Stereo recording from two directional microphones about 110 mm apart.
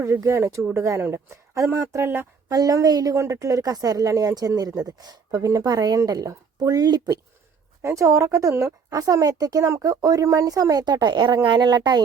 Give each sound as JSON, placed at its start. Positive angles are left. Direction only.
{"t": 0.0, "sound": "speech", "side_deg": -25}
{"t": 2.5, "sound": "a woman's voice", "side_deg": -35}
{"t": 7.8, "sound": "a woman's voice", "side_deg": -25}